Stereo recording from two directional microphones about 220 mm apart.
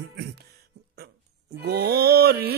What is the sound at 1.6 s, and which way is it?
Speech, 45° right (ahead or behind).